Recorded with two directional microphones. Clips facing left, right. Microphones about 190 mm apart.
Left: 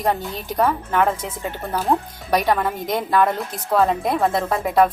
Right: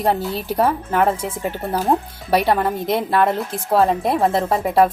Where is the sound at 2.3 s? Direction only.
30° right (ahead or behind).